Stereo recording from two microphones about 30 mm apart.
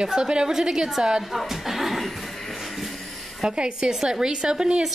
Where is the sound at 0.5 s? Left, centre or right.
Centre.